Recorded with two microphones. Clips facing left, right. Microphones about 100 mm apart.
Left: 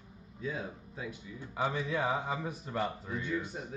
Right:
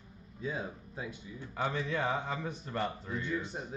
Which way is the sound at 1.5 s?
10° left (ahead or behind).